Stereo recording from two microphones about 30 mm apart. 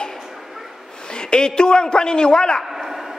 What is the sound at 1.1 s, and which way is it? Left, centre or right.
A man's voice, left.